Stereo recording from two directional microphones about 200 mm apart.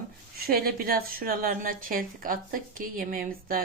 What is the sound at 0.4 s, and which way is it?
A woman's voice, 50° right (ahead or behind).